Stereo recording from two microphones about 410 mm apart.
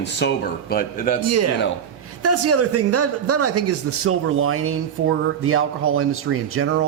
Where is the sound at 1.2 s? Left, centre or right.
Right.